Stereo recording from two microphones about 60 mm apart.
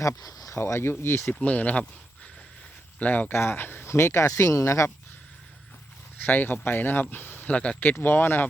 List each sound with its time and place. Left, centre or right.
0.2 s a sound: left
0.5 s speech: left
1.3 s speech: left
3.0 s speech: left
3.3 s speech: left
6.2 s speech: left
7.5 s speech: centre
7.8 s speech: left